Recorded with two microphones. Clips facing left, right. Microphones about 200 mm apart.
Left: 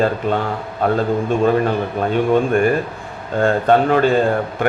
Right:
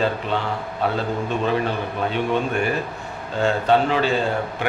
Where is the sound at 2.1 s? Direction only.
45° left (ahead or behind).